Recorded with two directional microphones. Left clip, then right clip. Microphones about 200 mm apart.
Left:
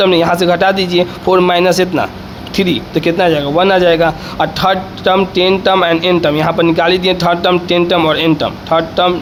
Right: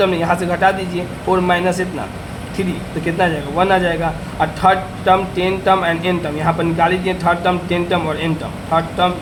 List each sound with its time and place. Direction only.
0.0 s a man's voice: 50° left (ahead or behind)